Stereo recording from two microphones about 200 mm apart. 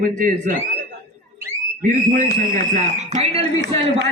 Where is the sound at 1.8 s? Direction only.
40° right (ahead or behind).